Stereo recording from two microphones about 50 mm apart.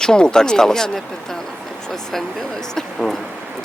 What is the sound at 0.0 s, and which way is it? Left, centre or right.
Speech, centre.